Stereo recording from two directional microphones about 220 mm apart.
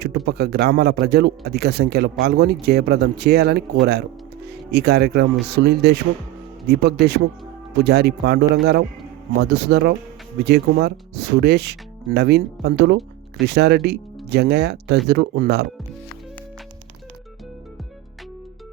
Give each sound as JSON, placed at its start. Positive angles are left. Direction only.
{"t": 0.3, "sound": "speech", "side_deg": -45}